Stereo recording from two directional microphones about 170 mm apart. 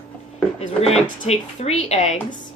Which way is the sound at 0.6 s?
40° left (ahead or behind).